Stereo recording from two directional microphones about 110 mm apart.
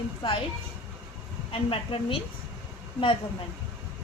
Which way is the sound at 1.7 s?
55° left (ahead or behind).